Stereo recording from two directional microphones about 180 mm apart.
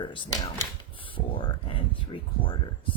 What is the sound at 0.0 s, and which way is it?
Speech, 25° left (ahead or behind).